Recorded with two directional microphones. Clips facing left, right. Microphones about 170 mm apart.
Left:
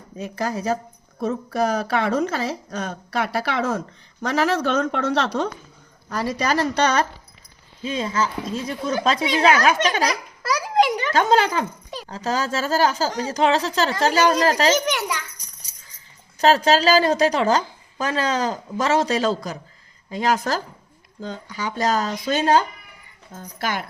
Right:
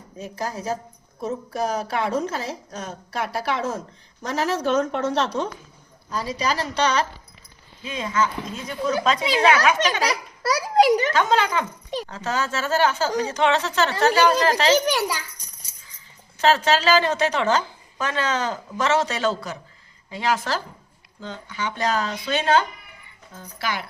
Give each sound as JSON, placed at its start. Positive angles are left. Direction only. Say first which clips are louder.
{"t": 0.2, "sound": "a woman's voice", "louder": "left 4 dB", "side_deg": 70}
{"t": 6.1, "sound": "a woman's voice", "louder": "left 2 dB", "side_deg": 60}
{"t": 7.8, "sound": "a woman's voice", "louder": "left 1 dB", "side_deg": 30}
{"t": 10.1, "sound": "a child's voice", "louder": "right 1 dB", "side_deg": -40}
{"t": 11.1, "sound": "a woman's voice", "louder": "left 2 dB", "side_deg": 35}
{"t": 14.7, "sound": "a child's voice", "louder": "right 1 dB", "side_deg": -35}
{"t": 16.4, "sound": "a woman's voice", "louder": "left 3 dB", "side_deg": 40}